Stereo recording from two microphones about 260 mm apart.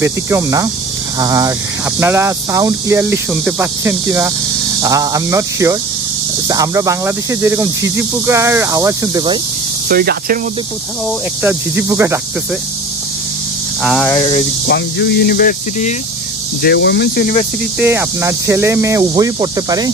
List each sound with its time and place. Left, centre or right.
0.0 s speech: centre
9.8 s speech: right
11.4 s speech: centre
13.8 s speech: centre
14.7 s speech: left
17.7 s speech: centre